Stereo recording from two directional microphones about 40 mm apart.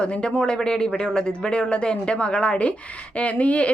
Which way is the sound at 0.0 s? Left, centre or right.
Left.